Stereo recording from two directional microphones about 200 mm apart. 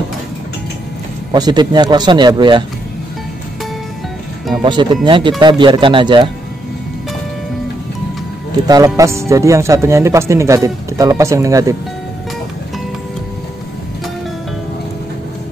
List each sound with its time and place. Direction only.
1.3 s speech: 20° right (ahead or behind)
4.6 s speech: 25° right (ahead or behind)
8.6 s speech: 20° right (ahead or behind)